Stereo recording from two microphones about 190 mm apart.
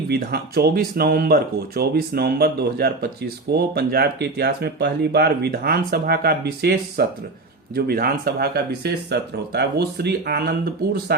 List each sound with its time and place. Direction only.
0.1 s speech: 55° right (ahead or behind)